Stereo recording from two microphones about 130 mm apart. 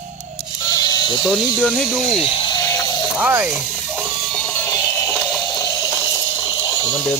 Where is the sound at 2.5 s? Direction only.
25° left (ahead or behind).